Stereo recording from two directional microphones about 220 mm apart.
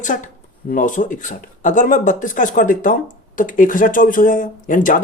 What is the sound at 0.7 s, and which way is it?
Speech, 35° left (ahead or behind).